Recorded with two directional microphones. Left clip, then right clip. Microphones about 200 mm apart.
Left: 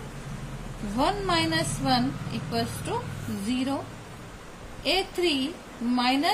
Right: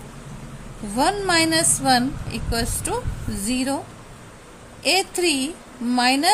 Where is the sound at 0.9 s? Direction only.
50° right (ahead or behind).